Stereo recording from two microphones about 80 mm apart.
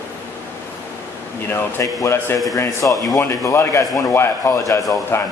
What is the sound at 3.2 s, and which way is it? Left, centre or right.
A man's voice, left.